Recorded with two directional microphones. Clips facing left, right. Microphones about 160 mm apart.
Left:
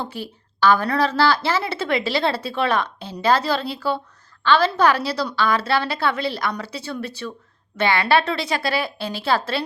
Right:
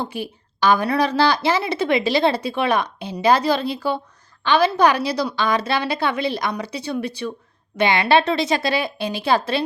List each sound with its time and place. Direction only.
0.0 s a woman's voice: 15° right (ahead or behind)